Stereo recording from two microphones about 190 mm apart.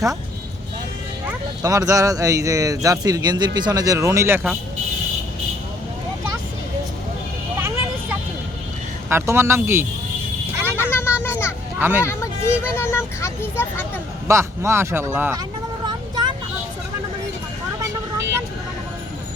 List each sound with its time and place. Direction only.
1.3 s speech: 20° right (ahead or behind)
9.0 s speech: 15° right (ahead or behind)
10.6 s vehicle: 10° right (ahead or behind)
10.8 s a sound: 10° left (ahead or behind)
11.2 s children playing: 10° left (ahead or behind)
11.8 s speech: 10° right (ahead or behind)
12.0 s speech: 15° left (ahead or behind)
14.3 s speech: 15° right (ahead or behind)
15.9 s vehicle: 25° right (ahead or behind)